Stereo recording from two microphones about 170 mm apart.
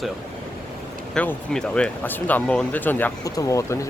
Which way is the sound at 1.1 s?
5° left (ahead or behind).